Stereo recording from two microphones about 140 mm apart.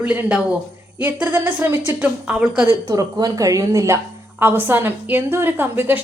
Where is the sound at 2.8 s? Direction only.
25° right (ahead or behind).